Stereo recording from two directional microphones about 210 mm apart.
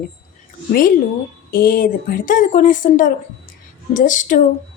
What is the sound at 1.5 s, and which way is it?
A woman's voice, 45° left (ahead or behind).